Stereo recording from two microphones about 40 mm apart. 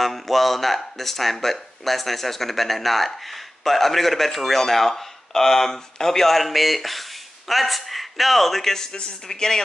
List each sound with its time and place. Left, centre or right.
0.0 s a man's voice: centre